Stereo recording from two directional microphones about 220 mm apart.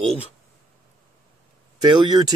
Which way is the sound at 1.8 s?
20° right (ahead or behind).